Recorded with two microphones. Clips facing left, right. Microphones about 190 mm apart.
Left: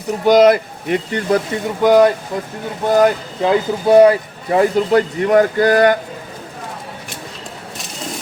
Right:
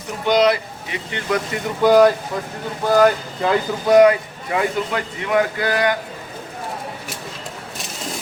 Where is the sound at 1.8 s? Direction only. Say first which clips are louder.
Left 1 dB; 20° left (ahead or behind); by 5.9 s 40° left (ahead or behind).